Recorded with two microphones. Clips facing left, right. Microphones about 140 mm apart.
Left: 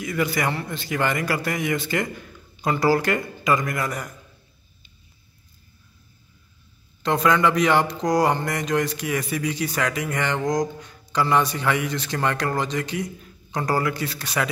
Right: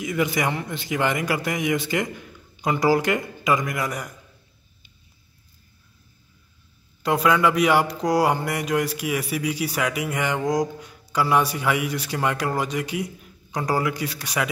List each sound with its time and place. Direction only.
0.0 s speech: 15° right (ahead or behind)
7.0 s speech: 5° right (ahead or behind)